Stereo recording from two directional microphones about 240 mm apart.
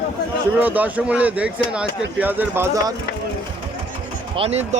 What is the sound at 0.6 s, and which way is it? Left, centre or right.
Speech, centre.